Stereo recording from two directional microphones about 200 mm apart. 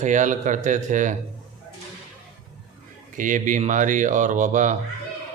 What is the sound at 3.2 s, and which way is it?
Speech, 40° right (ahead or behind).